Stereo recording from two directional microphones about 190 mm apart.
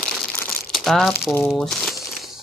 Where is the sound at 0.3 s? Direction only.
10° left (ahead or behind).